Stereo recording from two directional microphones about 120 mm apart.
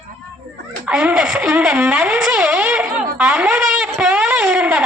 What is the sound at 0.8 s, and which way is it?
Speech, 10° right (ahead or behind).